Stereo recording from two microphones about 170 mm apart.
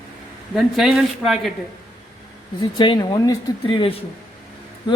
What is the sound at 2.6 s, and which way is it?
Speech, 25° left (ahead or behind).